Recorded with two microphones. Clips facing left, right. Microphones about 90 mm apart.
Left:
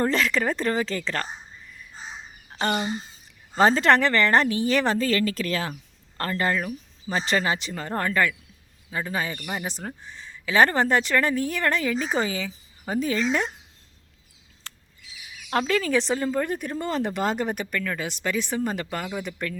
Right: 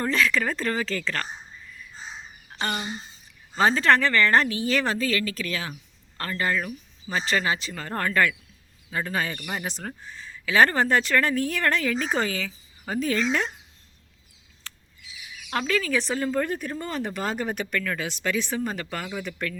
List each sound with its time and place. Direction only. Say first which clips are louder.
0.0 s a woman's voice: left 1 dB; 30° left (ahead or behind)
2.6 s a woman's voice: left 4 dB; 30° left (ahead or behind); by 9.3 s 10° left (ahead or behind)
9.3 s speech: left 1 dB; centre (ahead or behind)
9.6 s speech: left 1 dB; 15° left (ahead or behind)
15.4 s a woman's voice: left 2 dB; 30° left (ahead or behind)